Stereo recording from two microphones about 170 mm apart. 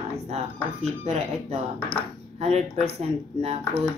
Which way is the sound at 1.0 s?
40° right (ahead or behind).